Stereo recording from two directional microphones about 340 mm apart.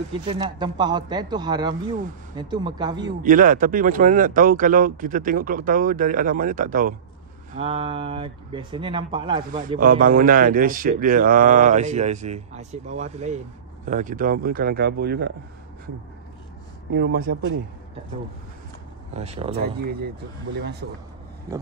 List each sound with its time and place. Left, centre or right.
0.1 s speech: centre
3.3 s speech: right
16.9 s speech: right
19.1 s speech: centre
19.5 s speech: right